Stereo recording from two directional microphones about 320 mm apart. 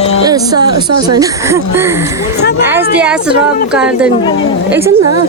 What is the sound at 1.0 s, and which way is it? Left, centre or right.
A woman's voice, centre.